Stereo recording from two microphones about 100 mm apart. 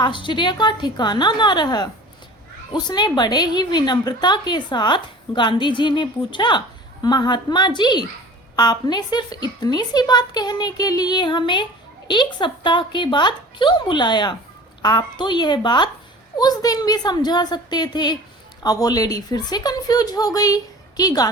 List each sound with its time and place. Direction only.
0.0 s a woman's voice: 55° left (ahead or behind); by 21.2 s 40° left (ahead or behind)